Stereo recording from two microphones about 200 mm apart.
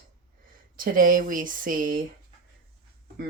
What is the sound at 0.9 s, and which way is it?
Speech, 45° right (ahead or behind).